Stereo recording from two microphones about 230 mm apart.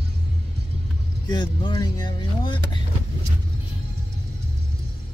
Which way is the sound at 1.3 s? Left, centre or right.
Left.